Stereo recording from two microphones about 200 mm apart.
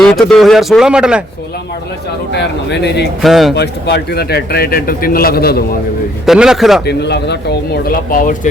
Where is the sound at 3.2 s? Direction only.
Centre (ahead or behind).